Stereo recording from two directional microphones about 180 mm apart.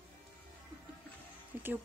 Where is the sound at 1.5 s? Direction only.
10° right (ahead or behind).